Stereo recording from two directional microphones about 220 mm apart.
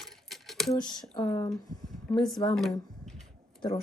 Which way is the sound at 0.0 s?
Centre (ahead or behind).